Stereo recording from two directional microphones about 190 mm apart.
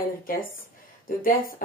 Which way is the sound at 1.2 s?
45° left (ahead or behind).